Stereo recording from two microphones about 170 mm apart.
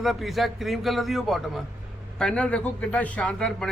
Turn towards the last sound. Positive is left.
turn(degrees=5)  # may be behind; listen again after turning